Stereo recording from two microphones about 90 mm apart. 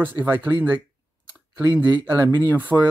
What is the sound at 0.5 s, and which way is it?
Speech, 20° right (ahead or behind).